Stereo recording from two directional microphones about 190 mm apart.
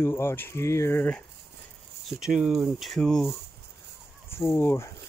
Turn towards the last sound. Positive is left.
turn(degrees=10)  # may be behind; listen again after turning